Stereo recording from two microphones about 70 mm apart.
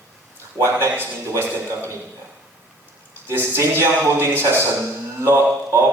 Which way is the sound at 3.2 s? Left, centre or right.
Right.